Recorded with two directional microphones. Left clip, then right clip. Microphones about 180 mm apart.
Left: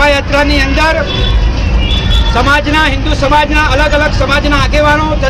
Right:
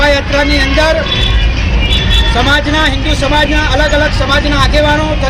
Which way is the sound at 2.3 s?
Centre (ahead or behind).